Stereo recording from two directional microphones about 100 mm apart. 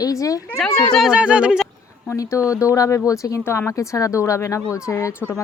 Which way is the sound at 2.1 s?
30° left (ahead or behind).